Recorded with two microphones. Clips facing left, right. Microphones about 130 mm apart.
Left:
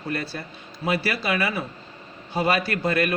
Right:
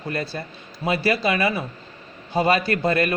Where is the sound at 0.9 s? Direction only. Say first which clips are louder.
Right 3 dB; 25° right (ahead or behind).